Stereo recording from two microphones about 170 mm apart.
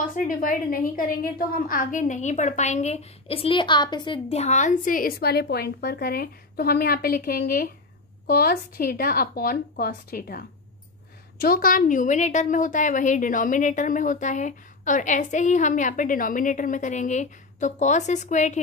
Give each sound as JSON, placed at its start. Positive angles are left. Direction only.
{"t": 0.0, "sound": "a woman's voice", "side_deg": 50}
{"t": 11.4, "sound": "a woman's voice", "side_deg": 60}